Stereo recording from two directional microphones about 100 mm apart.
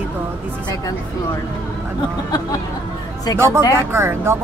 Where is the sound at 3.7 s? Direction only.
25° right (ahead or behind).